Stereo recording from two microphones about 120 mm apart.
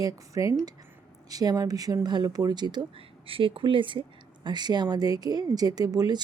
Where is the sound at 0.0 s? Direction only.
30° right (ahead or behind).